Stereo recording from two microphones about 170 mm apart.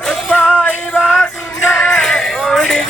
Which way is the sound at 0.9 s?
5° right (ahead or behind).